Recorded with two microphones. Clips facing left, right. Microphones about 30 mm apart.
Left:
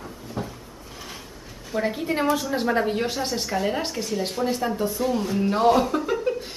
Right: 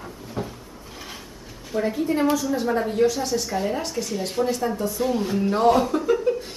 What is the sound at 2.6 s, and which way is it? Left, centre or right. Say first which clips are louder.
Speech: right 3 dB; left.